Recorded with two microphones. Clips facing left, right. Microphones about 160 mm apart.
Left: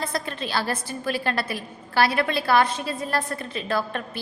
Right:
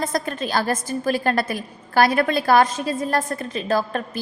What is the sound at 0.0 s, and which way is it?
A woman's voice, 45° right (ahead or behind).